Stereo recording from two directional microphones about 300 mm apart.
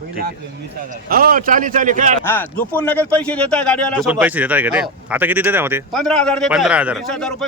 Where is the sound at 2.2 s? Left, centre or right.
Centre.